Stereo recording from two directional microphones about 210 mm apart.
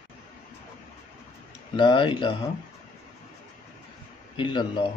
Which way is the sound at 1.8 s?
25° left (ahead or behind).